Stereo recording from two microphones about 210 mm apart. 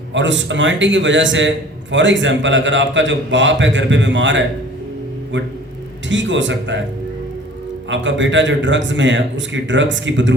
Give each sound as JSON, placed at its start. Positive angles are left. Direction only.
{"t": 0.1, "sound": "a man's voice", "side_deg": -60}
{"t": 6.1, "sound": "a man's voice", "side_deg": -60}
{"t": 7.9, "sound": "a man's voice", "side_deg": -60}